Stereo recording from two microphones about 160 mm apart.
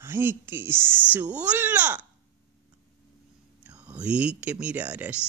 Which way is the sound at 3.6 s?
10° right (ahead or behind).